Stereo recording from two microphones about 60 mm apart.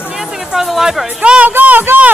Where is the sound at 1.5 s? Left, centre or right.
Right.